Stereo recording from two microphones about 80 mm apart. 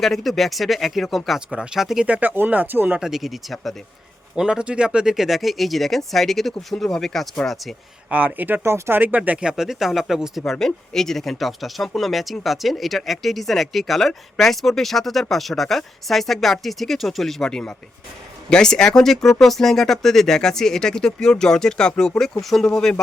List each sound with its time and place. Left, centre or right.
0.0 s speech: centre
2.0 s speech: centre
3.0 s speech: centre
4.4 s speech: centre
8.1 s speech: centre
8.6 s speech: right
9.0 s speech: centre
10.4 s speech: centre